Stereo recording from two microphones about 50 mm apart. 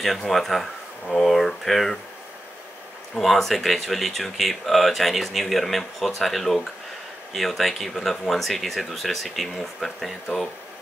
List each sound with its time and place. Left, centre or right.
0.0 s speech: centre
1.0 s speech: centre
3.2 s speech: centre